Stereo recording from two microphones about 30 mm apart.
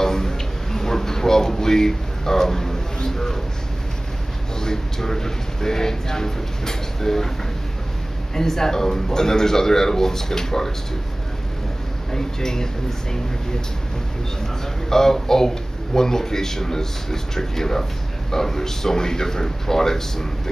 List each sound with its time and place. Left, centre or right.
0.0 s a sound: centre
4.6 s a man's voice: centre
8.4 s a man's voice: centre
12.1 s speech: centre
14.9 s a man's voice: centre